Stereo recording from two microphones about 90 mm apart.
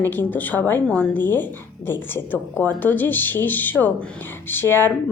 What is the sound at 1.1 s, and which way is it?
A woman's voice, 20° left (ahead or behind).